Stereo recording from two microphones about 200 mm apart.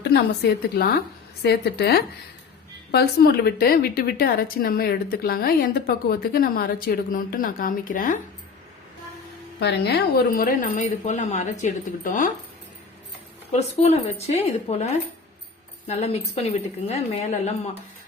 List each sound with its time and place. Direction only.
0.0 s a woman's voice: 55° left (ahead or behind)
9.6 s a woman's voice: 60° left (ahead or behind); by 12.3 s 40° left (ahead or behind)
13.5 s a woman's voice: 30° left (ahead or behind)